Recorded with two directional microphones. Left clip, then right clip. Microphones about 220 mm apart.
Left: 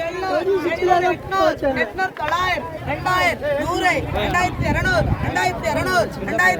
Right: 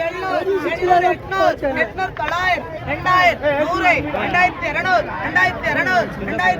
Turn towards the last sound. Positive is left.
turn(degrees=20)  # may be behind; listen again after turning